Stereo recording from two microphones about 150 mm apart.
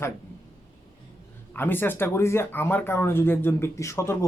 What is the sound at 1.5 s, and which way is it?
Speech, 15° left (ahead or behind).